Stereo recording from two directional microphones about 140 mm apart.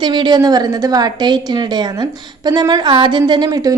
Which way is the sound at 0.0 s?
35° right (ahead or behind).